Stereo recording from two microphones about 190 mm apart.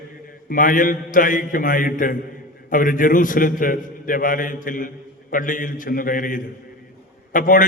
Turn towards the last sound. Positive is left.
turn(degrees=45)  # may be behind; listen again after turning